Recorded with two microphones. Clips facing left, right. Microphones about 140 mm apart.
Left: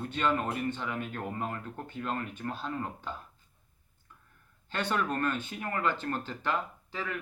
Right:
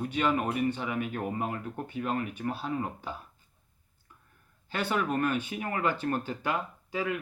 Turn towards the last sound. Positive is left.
turn(degrees=-15)  # may be behind; listen again after turning